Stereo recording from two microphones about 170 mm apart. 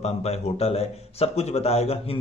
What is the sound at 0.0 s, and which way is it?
Speech, 40° left (ahead or behind).